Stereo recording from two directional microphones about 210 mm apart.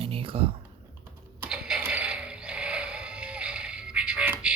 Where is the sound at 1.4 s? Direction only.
5° right (ahead or behind).